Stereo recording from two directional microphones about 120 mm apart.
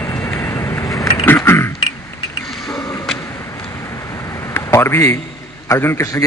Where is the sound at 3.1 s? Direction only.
25° left (ahead or behind).